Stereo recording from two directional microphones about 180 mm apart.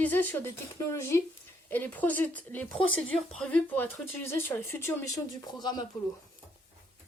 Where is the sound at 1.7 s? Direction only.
10° left (ahead or behind).